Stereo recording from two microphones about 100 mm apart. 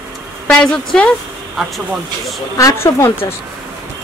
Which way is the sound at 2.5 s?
30° left (ahead or behind).